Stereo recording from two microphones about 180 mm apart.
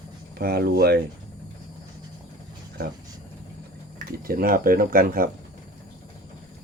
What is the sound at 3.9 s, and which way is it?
Speech, 55° right (ahead or behind).